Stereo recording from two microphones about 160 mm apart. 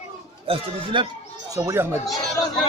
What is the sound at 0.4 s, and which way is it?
Speech, 35° right (ahead or behind).